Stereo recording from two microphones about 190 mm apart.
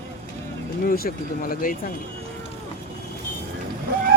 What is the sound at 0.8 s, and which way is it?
Speech, 50° left (ahead or behind).